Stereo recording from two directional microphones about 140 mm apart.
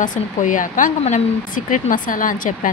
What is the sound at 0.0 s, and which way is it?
Speech, 65° left (ahead or behind).